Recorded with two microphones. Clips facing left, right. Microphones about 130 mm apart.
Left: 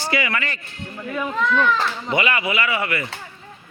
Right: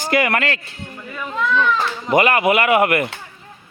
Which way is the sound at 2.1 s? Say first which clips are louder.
Right 9 dB; 50° right (ahead or behind).